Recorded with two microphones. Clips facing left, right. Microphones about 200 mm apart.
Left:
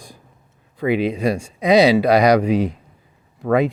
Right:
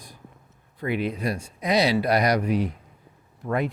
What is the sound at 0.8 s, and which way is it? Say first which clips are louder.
Speech: left 8 dB; 90° left.